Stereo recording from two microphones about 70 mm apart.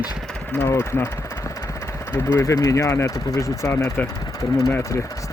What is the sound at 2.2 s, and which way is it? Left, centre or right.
Speech, left.